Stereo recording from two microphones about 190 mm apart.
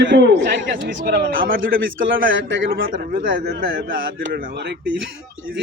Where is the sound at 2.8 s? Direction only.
50° right (ahead or behind).